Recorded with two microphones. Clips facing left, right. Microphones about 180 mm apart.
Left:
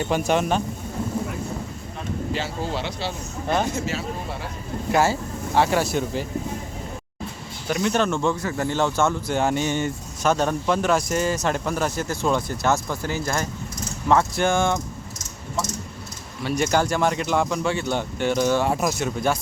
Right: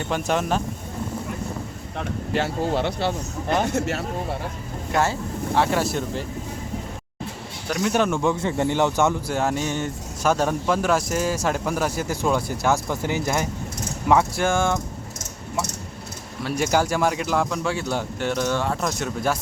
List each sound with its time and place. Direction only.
0.1 s speech: centre (ahead or behind)
2.0 s speech: 55° right (ahead or behind)
3.7 s speech: 65° right (ahead or behind)
4.9 s speech: centre (ahead or behind)
7.7 s speech: 5° right (ahead or behind)
8.4 s speech: 25° right (ahead or behind)
9.3 s speech: centre (ahead or behind)
16.4 s speech: 5° right (ahead or behind)